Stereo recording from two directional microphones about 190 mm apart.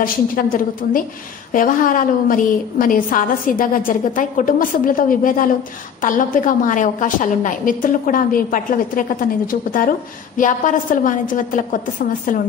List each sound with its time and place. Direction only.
0.0 s a woman's voice: 50° left (ahead or behind)